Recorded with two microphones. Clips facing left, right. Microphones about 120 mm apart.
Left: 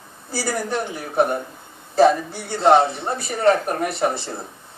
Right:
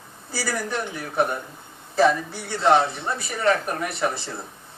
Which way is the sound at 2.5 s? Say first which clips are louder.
Left 4 dB; 35° left (ahead or behind).